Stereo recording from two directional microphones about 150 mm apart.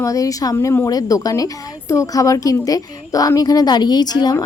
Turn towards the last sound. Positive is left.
turn(degrees=25)  # may be behind; listen again after turning